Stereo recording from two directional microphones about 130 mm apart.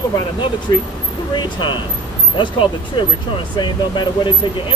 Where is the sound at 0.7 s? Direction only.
35° left (ahead or behind).